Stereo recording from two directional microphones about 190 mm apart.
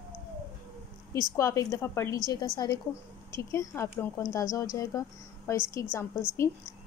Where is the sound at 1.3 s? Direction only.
15° left (ahead or behind).